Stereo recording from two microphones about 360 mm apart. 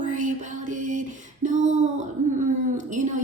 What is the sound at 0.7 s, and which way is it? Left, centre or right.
Female singing, right.